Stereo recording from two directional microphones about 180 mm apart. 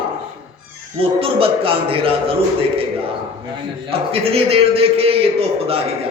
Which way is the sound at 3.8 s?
30° right (ahead or behind).